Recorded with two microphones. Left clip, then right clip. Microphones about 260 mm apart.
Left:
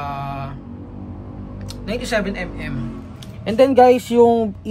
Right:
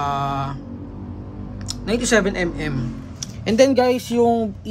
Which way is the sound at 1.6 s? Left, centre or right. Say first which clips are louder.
Right 4 dB; centre.